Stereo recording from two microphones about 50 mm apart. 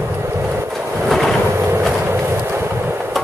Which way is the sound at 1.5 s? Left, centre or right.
Right.